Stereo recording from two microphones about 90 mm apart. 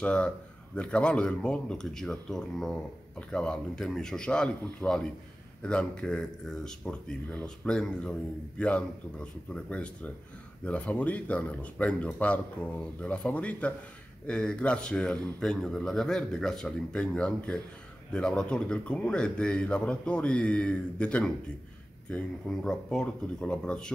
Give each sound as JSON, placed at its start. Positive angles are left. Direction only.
{"t": 0.0, "sound": "a man's voice", "side_deg": 15}